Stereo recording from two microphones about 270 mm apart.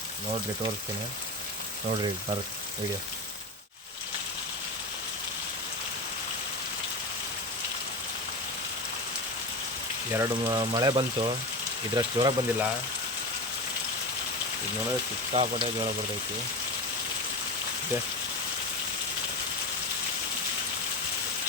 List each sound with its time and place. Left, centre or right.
10.1 s speech: centre
15.3 s speech: right